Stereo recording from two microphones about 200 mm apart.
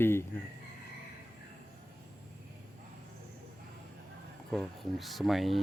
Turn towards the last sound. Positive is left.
turn(degrees=0)  # may be behind; listen again after turning